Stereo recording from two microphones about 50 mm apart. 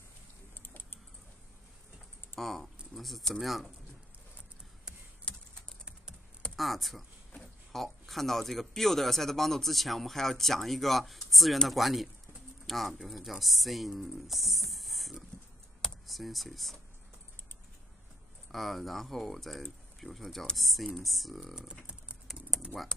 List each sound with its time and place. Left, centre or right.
0.6 s typing: left
2.3 s speech: centre
5.3 s typing: left
6.5 s speech: centre
18.5 s speech: centre
22.3 s typing: centre